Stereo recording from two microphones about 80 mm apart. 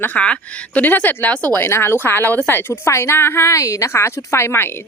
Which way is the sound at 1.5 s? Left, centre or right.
Left.